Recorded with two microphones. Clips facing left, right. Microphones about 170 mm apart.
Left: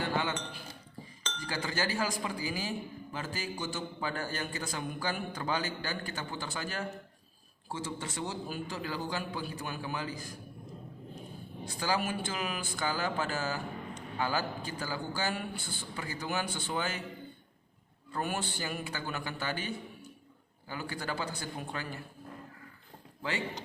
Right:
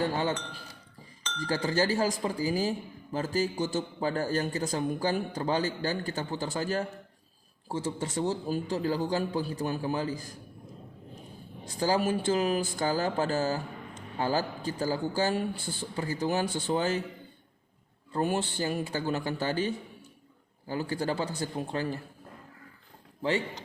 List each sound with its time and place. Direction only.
0.0 s a man's voice: 35° right (ahead or behind)
11.8 s a man's voice: 35° right (ahead or behind)
18.1 s a man's voice: 30° right (ahead or behind)